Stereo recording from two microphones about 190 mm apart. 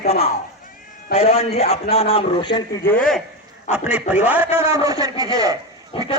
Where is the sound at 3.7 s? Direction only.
5° right (ahead or behind).